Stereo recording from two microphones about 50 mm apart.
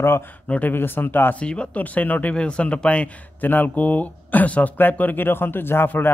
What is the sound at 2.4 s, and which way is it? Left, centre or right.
Speech, left.